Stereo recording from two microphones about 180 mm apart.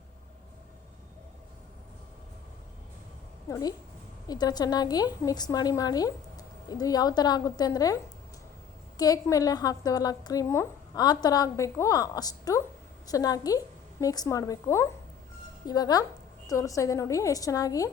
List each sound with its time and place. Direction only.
3.5 s a woman's voice: 20° left (ahead or behind)
9.0 s a woman's voice: 20° left (ahead or behind)